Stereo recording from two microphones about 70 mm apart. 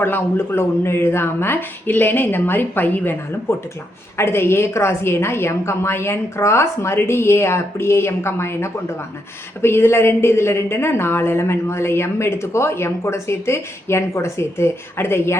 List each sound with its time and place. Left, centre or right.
0.0 s speech: left
4.2 s speech: left